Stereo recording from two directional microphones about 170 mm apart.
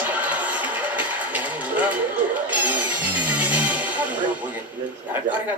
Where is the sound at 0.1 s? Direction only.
10° right (ahead or behind).